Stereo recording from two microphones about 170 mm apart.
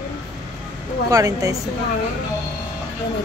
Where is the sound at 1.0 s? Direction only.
20° right (ahead or behind).